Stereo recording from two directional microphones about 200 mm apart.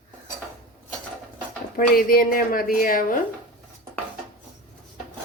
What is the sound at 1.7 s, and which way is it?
A woman's voice, 45° left (ahead or behind).